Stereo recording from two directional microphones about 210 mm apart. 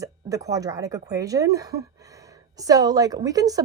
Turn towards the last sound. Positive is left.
turn(degrees=-15)  # may be behind; listen again after turning